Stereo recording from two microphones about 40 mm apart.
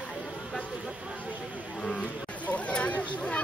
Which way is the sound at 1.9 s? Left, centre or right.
Left.